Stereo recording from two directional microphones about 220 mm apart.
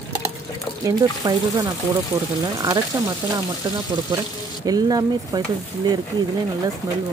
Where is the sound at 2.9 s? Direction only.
10° right (ahead or behind).